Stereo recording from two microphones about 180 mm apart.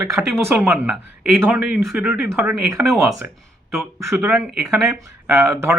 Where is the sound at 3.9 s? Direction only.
10° right (ahead or behind).